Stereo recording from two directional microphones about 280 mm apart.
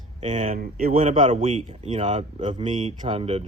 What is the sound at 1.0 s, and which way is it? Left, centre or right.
A man's voice, centre.